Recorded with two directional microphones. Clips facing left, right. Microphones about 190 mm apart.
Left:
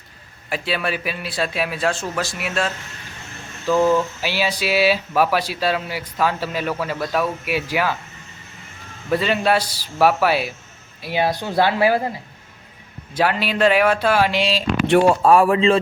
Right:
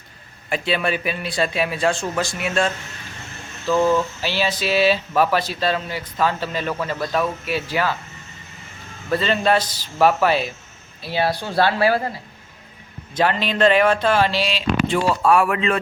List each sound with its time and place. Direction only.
0.5 s a man's voice: 5° left (ahead or behind)
9.0 s speech: 10° left (ahead or behind)
13.1 s speech: 5° left (ahead or behind)
14.8 s speech: 60° left (ahead or behind)
15.2 s speech: 35° left (ahead or behind)